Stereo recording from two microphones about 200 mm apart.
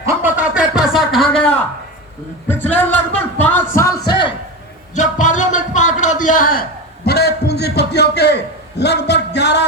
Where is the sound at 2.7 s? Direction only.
10° left (ahead or behind).